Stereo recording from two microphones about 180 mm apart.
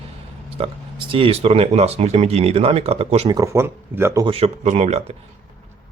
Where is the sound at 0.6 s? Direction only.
30° right (ahead or behind).